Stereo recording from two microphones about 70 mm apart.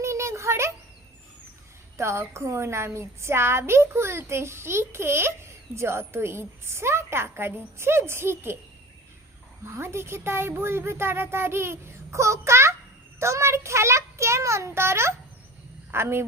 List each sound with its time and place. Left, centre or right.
0.0 s a sound: right
2.0 s a woman's voice: right
9.6 s a woman's voice: right
13.1 s child singing: right
15.9 s a woman's voice: right